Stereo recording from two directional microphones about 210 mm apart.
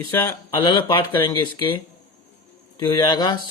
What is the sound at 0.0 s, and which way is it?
Speech, 10° left (ahead or behind).